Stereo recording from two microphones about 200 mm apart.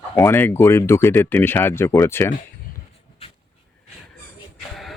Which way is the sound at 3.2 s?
30° left (ahead or behind).